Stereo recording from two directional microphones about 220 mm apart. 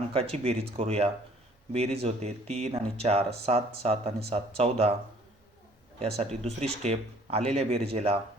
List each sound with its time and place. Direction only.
0.1 s speech: 25° right (ahead or behind)
6.1 s speech: 30° right (ahead or behind)